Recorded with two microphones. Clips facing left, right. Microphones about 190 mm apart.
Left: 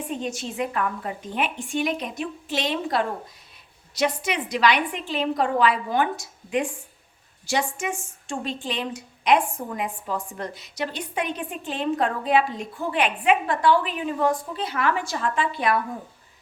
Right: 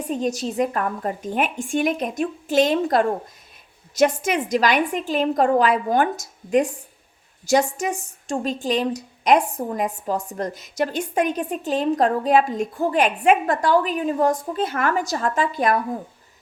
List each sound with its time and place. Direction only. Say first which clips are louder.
0.0 s a woman's voice: right 6 dB; 40° right (ahead or behind)